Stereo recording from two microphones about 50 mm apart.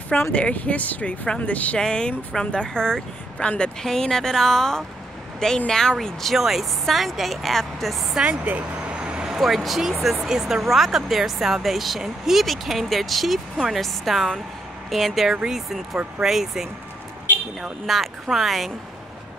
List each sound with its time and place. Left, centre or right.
0.3 s speech: left
1.8 s speech: centre
3.8 s a woman's voice: centre
8.2 s vehicle: right
9.3 s speech: centre
17.8 s speech: centre